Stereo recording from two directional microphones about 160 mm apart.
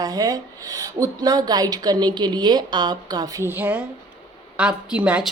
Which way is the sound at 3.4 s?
10° right (ahead or behind).